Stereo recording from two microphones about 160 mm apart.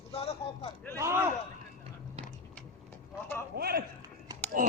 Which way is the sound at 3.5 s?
75° right (ahead or behind).